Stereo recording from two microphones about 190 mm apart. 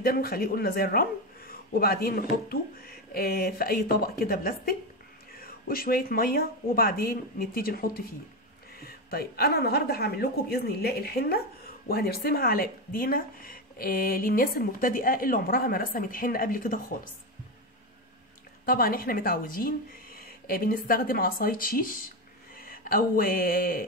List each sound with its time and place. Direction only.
0.0 s a woman's voice: 50° left (ahead or behind)
18.7 s speech: 50° left (ahead or behind)